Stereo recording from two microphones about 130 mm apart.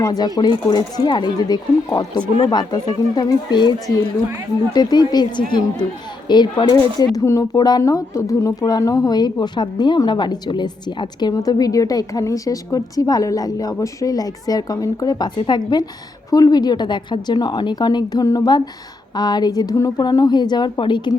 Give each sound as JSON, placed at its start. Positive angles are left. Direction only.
{"t": 0.0, "sound": "a woman's voice", "side_deg": 30}